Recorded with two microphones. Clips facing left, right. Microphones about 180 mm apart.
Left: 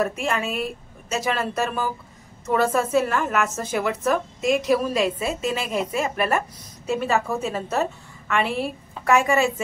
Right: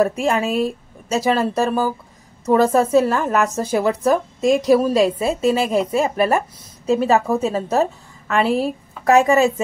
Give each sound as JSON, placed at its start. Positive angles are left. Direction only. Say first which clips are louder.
{"t": 0.0, "sound": "a woman's voice", "louder": "right 6 dB", "side_deg": -35}